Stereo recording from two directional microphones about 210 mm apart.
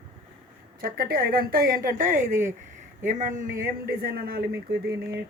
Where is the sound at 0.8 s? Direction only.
45° right (ahead or behind).